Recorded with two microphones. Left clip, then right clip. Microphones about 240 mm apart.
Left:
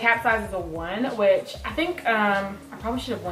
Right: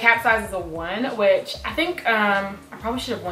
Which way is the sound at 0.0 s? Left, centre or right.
Centre.